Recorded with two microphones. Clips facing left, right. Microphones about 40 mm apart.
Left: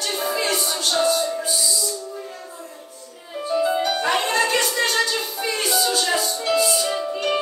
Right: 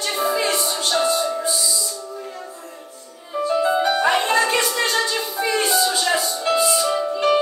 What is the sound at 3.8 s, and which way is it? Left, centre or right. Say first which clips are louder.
Music: right 3 dB; right.